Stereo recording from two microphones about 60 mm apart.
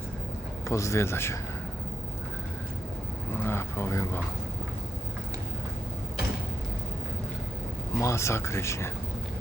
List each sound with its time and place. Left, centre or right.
0.7 s speech: left
3.3 s vehicle: left
7.9 s speech: left